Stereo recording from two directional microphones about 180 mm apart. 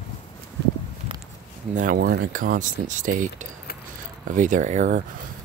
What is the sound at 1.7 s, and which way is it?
Speech, 50° right (ahead or behind).